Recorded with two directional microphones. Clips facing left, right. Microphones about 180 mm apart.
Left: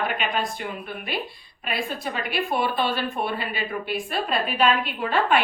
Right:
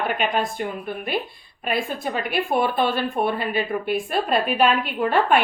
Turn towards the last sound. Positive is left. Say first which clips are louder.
# right 3 dB
turn(degrees=-50)  # may be behind; listen again after turning